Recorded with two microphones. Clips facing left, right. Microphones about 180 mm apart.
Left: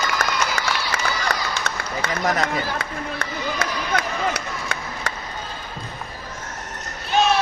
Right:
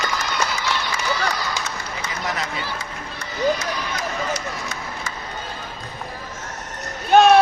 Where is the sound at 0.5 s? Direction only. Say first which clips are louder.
Even; 65° left (ahead or behind).